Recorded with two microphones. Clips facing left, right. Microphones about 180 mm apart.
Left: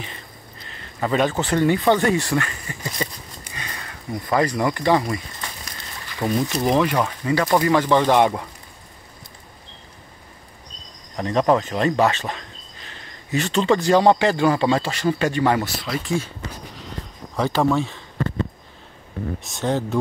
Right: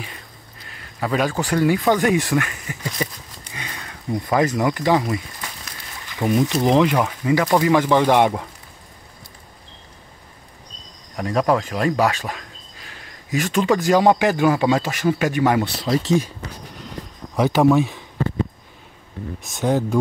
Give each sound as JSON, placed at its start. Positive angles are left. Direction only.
{"t": 0.0, "sound": "a sound", "side_deg": -5}
{"t": 2.0, "sound": "a man's voice", "side_deg": -15}
{"t": 11.1, "sound": "a man's voice", "side_deg": -5}
{"t": 15.9, "sound": "speech", "side_deg": -25}
{"t": 17.4, "sound": "a sound", "side_deg": -15}
{"t": 19.4, "sound": "speech", "side_deg": 0}